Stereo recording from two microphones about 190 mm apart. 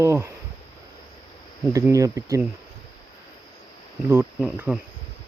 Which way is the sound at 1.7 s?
15° right (ahead or behind).